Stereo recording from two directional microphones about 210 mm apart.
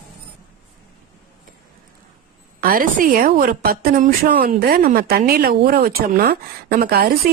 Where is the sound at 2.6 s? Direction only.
45° right (ahead or behind).